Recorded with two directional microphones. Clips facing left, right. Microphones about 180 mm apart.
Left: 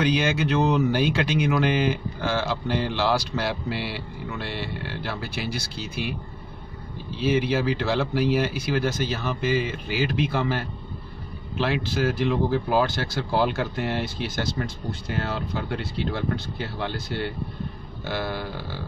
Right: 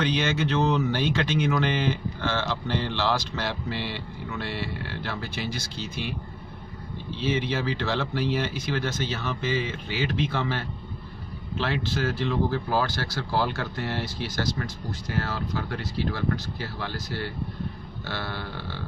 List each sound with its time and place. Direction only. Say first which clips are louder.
0.0 s speech: left 3 dB; 10° left (ahead or behind)
7.2 s speech: left 4 dB; 10° left (ahead or behind)